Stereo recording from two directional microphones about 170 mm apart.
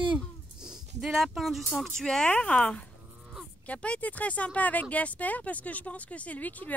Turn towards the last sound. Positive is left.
turn(degrees=10)  # may be behind; listen again after turning